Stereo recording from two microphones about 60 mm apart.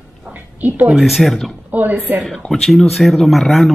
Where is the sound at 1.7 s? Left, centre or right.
Right.